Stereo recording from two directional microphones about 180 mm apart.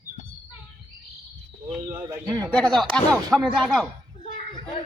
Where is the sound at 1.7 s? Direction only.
15° right (ahead or behind).